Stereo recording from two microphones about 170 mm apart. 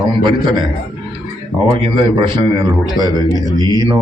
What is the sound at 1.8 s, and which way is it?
A man's voice, 30° right (ahead or behind).